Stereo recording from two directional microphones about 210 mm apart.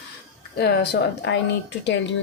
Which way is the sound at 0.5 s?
50° left (ahead or behind).